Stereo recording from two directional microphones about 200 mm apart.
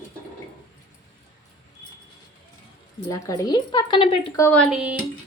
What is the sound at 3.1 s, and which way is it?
A woman's voice, 15° left (ahead or behind).